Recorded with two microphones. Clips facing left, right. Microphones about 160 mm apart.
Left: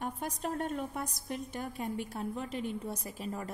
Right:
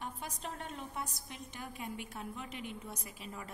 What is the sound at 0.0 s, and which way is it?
A woman's voice, 50° left (ahead or behind).